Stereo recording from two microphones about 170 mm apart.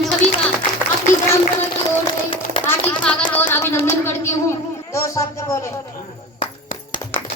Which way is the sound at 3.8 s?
15° left (ahead or behind).